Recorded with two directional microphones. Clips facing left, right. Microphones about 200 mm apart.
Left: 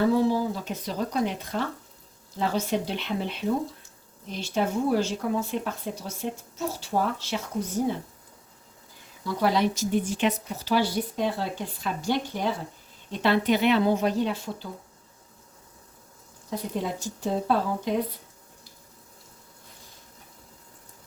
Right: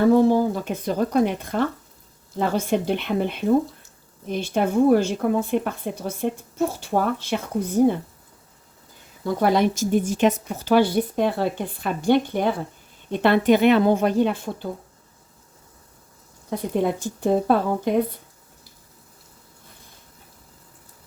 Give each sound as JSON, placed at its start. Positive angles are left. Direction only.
{"t": 0.1, "sound": "a woman's voice", "side_deg": -50}
{"t": 9.2, "sound": "a woman's voice", "side_deg": -50}
{"t": 16.5, "sound": "a woman's voice", "side_deg": -55}